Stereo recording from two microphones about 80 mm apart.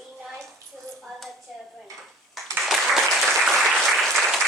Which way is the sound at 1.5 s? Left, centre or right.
Centre.